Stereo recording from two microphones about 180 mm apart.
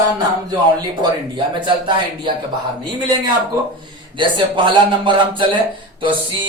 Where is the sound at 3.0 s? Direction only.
25° right (ahead or behind).